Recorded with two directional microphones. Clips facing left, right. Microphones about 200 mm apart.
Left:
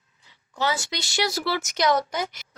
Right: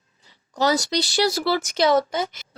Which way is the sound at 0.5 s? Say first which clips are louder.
Right 6 dB; 40° right (ahead or behind).